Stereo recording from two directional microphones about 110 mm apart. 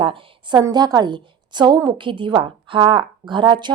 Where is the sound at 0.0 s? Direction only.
55° right (ahead or behind).